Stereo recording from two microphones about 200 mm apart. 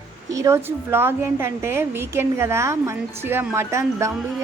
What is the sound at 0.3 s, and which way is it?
Speech, 15° right (ahead or behind).